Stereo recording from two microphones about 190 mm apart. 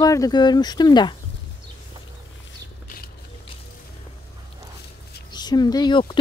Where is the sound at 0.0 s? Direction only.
20° left (ahead or behind).